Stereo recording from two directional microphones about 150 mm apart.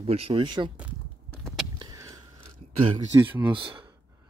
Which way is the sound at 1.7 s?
25° right (ahead or behind).